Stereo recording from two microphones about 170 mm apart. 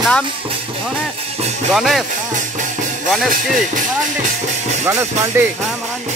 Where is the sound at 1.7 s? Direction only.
Centre (ahead or behind).